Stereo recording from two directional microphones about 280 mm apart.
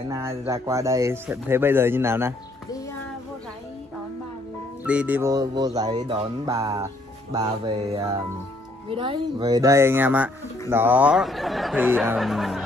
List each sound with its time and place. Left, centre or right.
0.1 s speech: centre
4.8 s speech: centre